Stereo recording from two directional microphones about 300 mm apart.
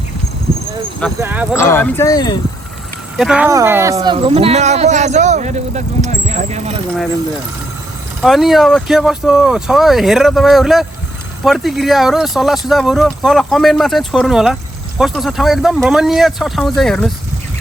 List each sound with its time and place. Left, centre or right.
1.2 s speech: centre
1.5 s speech: centre
3.2 s speech: centre; by 6.7 s right
8.2 s speech: centre